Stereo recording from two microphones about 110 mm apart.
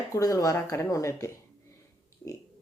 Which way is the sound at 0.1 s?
30° left (ahead or behind).